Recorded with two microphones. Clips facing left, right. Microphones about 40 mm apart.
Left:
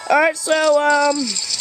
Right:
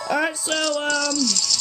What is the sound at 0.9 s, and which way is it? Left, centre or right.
Speech, centre.